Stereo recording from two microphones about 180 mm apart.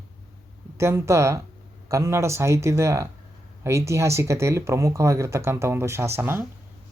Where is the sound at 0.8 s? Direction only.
15° right (ahead or behind).